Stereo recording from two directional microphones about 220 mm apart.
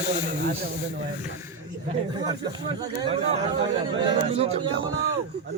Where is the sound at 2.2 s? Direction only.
20° right (ahead or behind).